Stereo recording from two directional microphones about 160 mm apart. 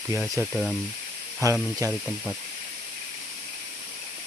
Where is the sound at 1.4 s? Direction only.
20° right (ahead or behind).